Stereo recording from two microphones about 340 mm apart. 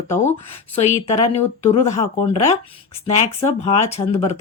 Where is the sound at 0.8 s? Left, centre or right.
Centre.